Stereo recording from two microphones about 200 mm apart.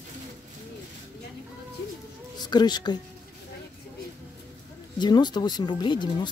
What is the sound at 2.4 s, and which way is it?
Speech, 20° left (ahead or behind).